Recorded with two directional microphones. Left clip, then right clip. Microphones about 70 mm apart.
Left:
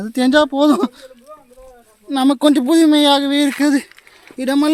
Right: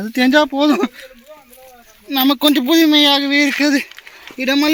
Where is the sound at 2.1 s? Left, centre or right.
Left.